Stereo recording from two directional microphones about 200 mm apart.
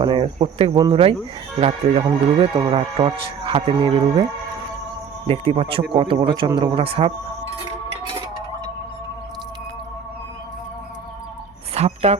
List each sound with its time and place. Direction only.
0.0 s speech: 25° right (ahead or behind)
11.7 s music: 30° right (ahead or behind)